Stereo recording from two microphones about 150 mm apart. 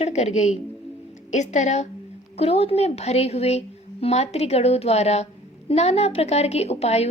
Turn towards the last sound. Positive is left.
turn(degrees=45)  # may be behind; listen again after turning